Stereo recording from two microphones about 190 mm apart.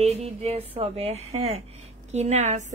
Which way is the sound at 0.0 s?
35° right (ahead or behind).